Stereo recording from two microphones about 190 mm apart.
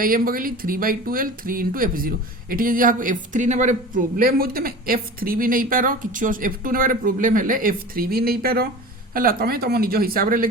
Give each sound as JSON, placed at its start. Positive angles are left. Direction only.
{"t": 0.0, "sound": "speech", "side_deg": -50}